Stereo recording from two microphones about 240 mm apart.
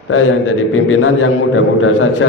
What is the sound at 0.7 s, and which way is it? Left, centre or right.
A man's voice, left.